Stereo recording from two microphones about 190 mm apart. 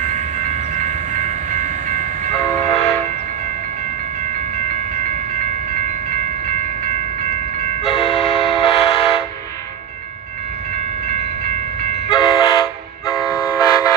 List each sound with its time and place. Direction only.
0.0 s train: 40° right (ahead or behind)
2.4 s train: 10° left (ahead or behind)
8.0 s train: 30° left (ahead or behind)
8.6 s vehicle: 30° left (ahead or behind)
12.1 s train: 25° left (ahead or behind)
13.1 s vehicle: 20° left (ahead or behind)